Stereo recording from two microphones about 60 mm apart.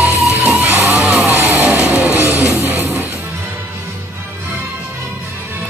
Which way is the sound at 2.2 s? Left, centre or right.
Right.